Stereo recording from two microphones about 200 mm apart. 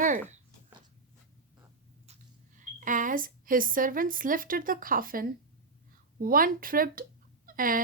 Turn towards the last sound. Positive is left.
turn(degrees=-45)  # may be behind; listen again after turning